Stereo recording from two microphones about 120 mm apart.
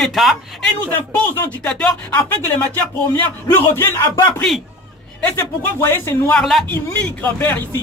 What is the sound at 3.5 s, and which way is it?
Speech, 20° left (ahead or behind).